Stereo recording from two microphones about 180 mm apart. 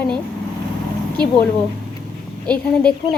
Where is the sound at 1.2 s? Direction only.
25° right (ahead or behind).